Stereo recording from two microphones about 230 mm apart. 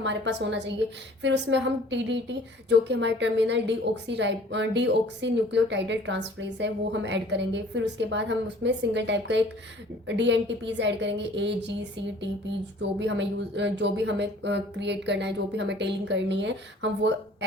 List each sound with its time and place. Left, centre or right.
0.0 s a woman's voice: right
13.0 s a woman's voice: right